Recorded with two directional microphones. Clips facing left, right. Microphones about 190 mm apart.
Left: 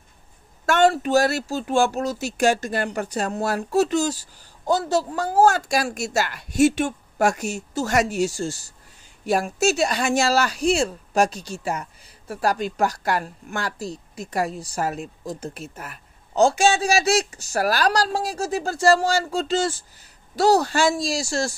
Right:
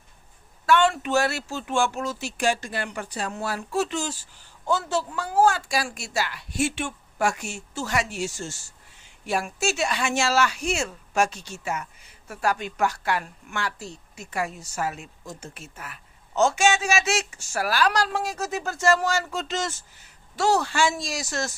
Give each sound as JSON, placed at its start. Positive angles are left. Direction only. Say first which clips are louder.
{"t": 0.7, "sound": "speech", "louder": "left 3 dB", "side_deg": 40}